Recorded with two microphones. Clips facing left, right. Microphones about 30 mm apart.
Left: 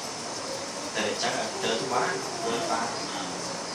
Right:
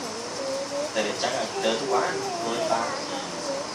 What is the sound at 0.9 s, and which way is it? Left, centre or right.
A man's voice, centre.